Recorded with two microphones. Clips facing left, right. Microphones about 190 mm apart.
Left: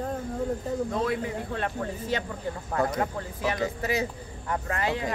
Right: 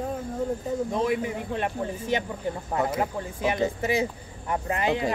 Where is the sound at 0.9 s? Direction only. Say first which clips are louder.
Right 2 dB; 20° right (ahead or behind).